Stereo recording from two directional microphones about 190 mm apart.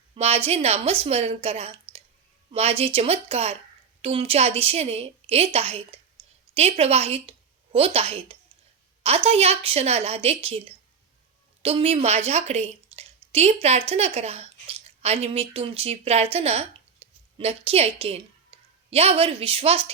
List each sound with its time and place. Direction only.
0.1 s a woman's voice: 30° right (ahead or behind)